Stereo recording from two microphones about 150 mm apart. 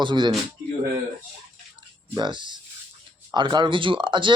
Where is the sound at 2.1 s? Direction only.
30° right (ahead or behind).